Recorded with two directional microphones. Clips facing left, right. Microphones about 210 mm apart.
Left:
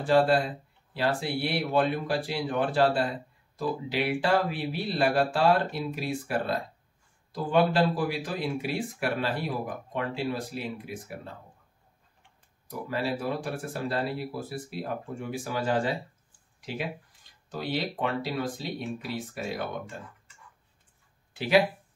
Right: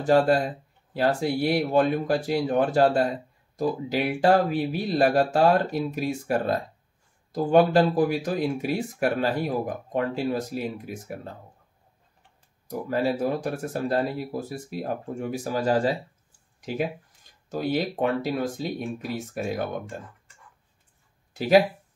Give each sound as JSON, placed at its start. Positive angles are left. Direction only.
{"t": 0.0, "sound": "speech", "side_deg": -45}
{"t": 12.6, "sound": "speech", "side_deg": -45}
{"t": 21.3, "sound": "speech", "side_deg": -40}